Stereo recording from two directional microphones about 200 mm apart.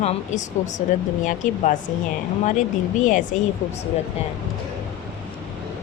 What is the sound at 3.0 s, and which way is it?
Speech, 40° left (ahead or behind).